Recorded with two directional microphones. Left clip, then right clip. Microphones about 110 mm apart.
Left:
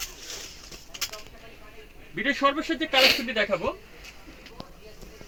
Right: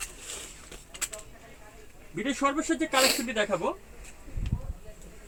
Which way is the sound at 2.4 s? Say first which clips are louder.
Left 1 dB; 15° right (ahead or behind).